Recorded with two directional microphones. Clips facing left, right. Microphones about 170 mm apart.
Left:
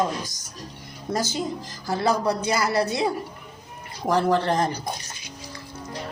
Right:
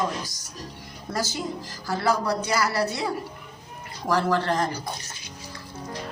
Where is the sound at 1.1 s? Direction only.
20° left (ahead or behind).